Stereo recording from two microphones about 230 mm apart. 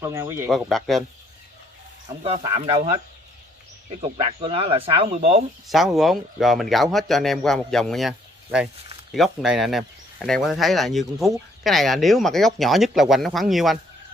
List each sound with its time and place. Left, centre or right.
0.0 s speech: centre
0.5 s speech: centre
2.0 s speech: right
4.0 s speech: right
5.7 s speech: centre